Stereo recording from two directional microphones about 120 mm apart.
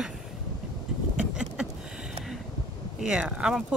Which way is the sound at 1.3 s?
5° right (ahead or behind).